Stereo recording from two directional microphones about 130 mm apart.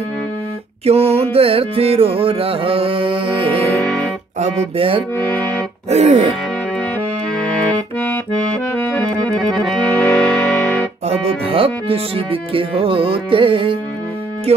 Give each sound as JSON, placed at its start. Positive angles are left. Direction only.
{"t": 0.8, "sound": "carnatic music", "side_deg": -50}
{"t": 3.8, "sound": "music", "side_deg": 5}
{"t": 4.4, "sound": "carnatic music", "side_deg": -45}
{"t": 5.1, "sound": "speech", "side_deg": 10}
{"t": 5.9, "sound": "music", "side_deg": -60}
{"t": 7.3, "sound": "accordion", "side_deg": 10}
{"t": 9.9, "sound": "music", "side_deg": 5}
{"t": 11.1, "sound": "carnatic music", "side_deg": -50}